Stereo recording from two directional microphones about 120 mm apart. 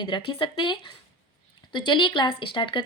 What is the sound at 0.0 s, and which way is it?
A woman's voice, 40° left (ahead or behind).